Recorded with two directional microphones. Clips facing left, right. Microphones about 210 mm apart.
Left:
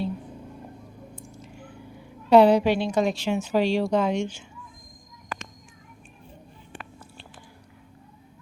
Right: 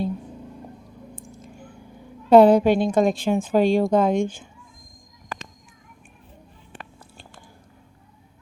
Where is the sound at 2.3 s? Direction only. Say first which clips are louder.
Right 3 dB; 50° right (ahead or behind).